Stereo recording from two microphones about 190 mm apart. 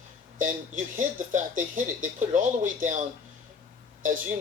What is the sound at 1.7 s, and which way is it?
Speech, 45° right (ahead or behind).